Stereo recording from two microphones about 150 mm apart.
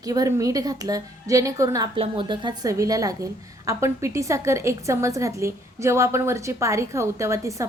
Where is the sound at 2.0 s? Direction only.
35° right (ahead or behind).